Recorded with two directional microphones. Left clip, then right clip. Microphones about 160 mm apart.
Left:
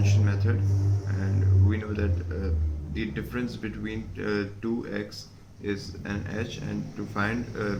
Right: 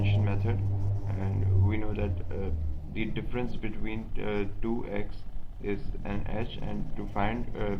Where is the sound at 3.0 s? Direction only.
20° right (ahead or behind).